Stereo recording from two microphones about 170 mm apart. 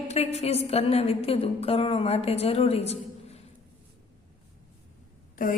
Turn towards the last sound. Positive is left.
turn(degrees=50)  # may be behind; listen again after turning